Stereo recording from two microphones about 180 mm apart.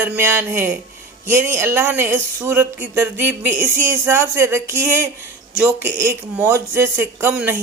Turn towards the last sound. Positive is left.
turn(degrees=-10)  # may be behind; listen again after turning